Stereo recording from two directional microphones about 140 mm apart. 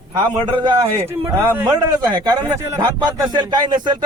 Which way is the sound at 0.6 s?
30° right (ahead or behind).